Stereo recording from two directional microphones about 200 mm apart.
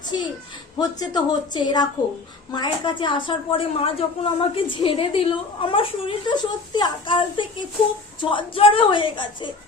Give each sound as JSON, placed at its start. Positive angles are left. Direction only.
{"t": 0.8, "sound": "a woman's voice", "side_deg": 20}